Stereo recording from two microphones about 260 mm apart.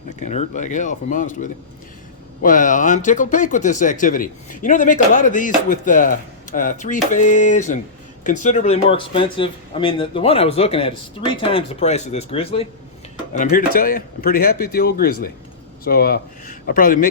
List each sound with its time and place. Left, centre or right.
0.2 s speech: left